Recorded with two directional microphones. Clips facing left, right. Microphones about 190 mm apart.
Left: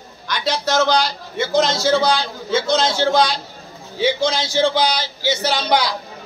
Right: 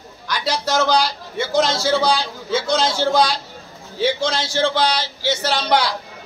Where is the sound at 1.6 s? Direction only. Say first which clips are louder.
Left 1 dB; 35° right (ahead or behind).